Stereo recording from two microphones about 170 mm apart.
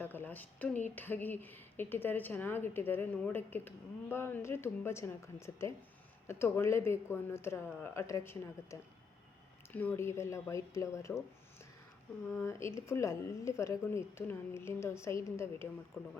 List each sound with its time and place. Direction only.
0.0 s speech: 10° left (ahead or behind)
12.3 s speech: 15° left (ahead or behind)